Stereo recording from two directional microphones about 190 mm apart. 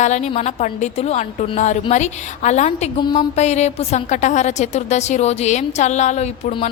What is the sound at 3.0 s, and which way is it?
Music, 25° left (ahead or behind).